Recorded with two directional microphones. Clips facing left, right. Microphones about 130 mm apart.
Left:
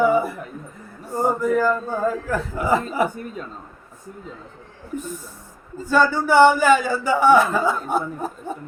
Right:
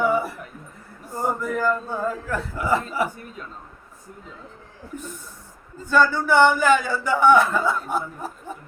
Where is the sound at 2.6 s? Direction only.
25° left (ahead or behind).